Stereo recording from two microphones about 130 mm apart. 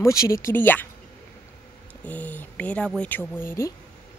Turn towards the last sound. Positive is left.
turn(degrees=20)  # may be behind; listen again after turning